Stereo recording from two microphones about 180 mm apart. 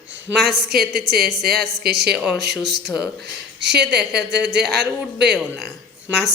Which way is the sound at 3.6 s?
70° right (ahead or behind).